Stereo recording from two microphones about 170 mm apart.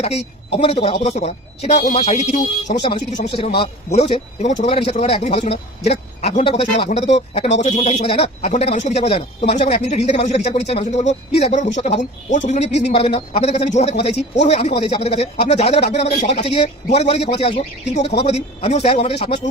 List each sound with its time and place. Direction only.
0.0 s a man's voice: 40° left (ahead or behind)
12.9 s a man's voice: 35° left (ahead or behind)